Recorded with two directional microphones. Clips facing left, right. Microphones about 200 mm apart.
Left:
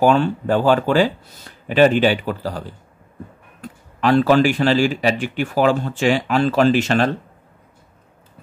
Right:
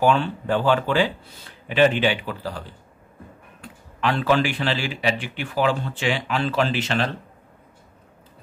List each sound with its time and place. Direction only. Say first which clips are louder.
0.0 s speech: left 5 dB; 40° left (ahead or behind)
3.6 s speech: left 6 dB; 40° left (ahead or behind)